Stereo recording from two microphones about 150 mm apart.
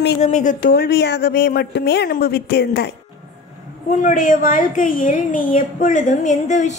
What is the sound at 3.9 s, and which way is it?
A woman's voice, 60° left (ahead or behind).